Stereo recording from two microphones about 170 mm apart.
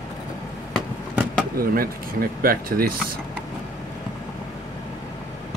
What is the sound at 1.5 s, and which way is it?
Speech, 60° right (ahead or behind).